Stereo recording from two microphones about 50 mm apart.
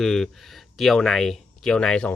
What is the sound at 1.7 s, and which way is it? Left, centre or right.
Speech, centre.